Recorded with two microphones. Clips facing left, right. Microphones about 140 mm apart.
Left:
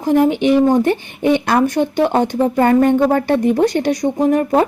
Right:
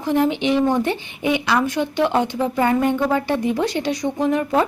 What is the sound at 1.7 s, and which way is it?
Speech, 45° left (ahead or behind).